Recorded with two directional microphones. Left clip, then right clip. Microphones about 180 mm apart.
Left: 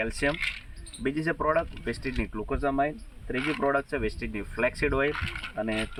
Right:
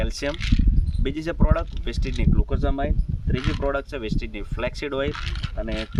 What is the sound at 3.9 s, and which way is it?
Speech, 40° right (ahead or behind).